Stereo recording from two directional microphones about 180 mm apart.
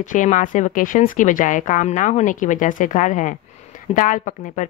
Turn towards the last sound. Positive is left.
turn(degrees=45)  # may be behind; listen again after turning